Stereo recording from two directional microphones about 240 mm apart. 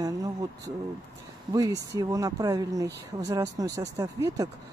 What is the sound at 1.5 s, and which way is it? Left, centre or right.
Speech, centre.